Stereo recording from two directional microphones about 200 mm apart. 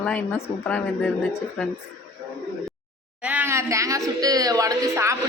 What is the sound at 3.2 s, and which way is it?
Speech, 10° right (ahead or behind).